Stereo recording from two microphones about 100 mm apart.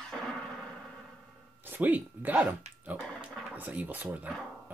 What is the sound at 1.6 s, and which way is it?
Speech, 20° right (ahead or behind).